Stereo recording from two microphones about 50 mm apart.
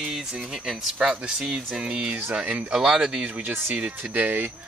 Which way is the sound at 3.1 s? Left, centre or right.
Right.